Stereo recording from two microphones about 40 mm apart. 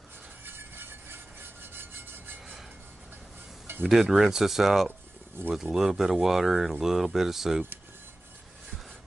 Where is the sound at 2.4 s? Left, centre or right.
Centre.